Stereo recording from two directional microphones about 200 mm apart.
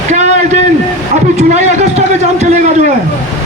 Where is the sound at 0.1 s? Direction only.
35° right (ahead or behind).